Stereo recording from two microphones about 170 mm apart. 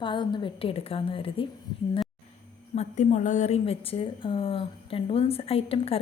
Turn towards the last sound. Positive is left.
turn(degrees=35)  # may be behind; listen again after turning